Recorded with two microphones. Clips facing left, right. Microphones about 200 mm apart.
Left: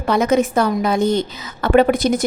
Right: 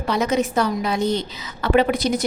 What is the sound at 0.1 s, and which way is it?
A woman's voice, 50° left (ahead or behind).